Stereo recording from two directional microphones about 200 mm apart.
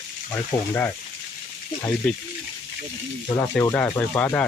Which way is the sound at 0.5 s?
20° left (ahead or behind).